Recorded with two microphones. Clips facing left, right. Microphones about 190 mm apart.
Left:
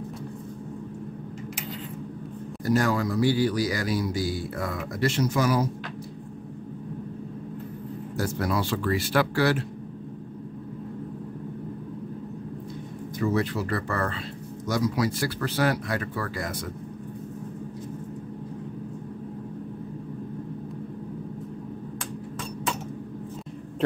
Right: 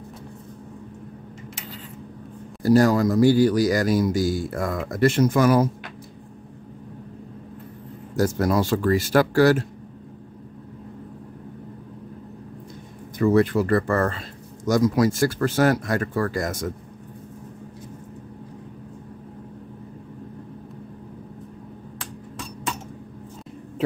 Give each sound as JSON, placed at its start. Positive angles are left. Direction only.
{"t": 2.6, "sound": "speech", "side_deg": -35}
{"t": 8.2, "sound": "speech", "side_deg": -45}
{"t": 13.2, "sound": "speech", "side_deg": -55}